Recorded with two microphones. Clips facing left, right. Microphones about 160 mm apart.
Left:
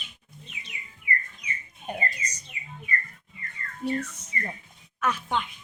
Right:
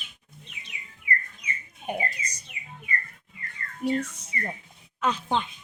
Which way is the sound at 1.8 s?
10° right (ahead or behind).